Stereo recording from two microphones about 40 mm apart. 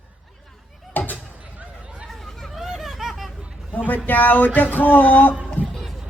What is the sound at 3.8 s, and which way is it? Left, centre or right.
Speech, left.